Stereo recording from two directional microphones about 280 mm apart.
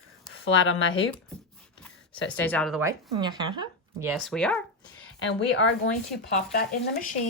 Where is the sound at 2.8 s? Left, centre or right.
Centre.